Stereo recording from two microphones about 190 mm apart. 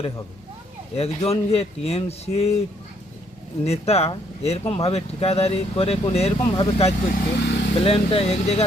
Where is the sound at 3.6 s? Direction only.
35° left (ahead or behind).